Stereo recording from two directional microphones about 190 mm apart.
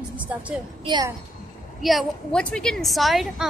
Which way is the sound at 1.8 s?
Centre (ahead or behind).